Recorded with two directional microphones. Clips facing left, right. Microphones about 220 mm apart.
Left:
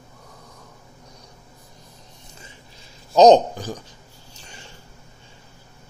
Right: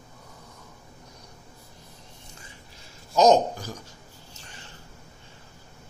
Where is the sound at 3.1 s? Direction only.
20° left (ahead or behind).